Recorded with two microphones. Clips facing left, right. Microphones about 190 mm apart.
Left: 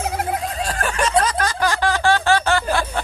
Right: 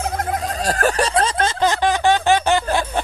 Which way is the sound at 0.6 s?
40° right (ahead or behind).